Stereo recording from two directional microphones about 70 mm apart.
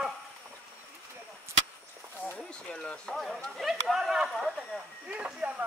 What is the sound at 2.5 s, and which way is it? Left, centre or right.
Speech, centre.